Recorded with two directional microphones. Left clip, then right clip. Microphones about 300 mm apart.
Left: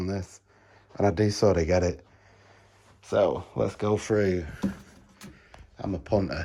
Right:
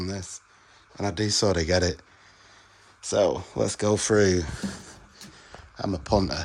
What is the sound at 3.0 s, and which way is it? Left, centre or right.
Speech, centre.